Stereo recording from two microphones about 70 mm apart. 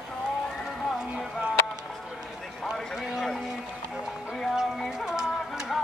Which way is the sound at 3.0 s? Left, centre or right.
Centre.